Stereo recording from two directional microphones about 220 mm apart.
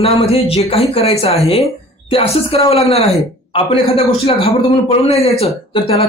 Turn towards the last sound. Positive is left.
turn(degrees=25)  # may be behind; listen again after turning